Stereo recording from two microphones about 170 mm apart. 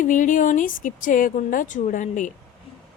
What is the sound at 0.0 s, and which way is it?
Speech, 50° left (ahead or behind).